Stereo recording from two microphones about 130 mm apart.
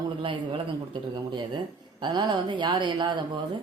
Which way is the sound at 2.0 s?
35° right (ahead or behind).